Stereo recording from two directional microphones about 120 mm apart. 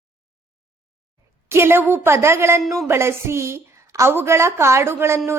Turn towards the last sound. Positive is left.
turn(degrees=-20)  # may be behind; listen again after turning